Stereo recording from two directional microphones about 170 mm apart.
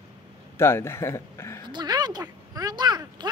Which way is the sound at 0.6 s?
15° left (ahead or behind).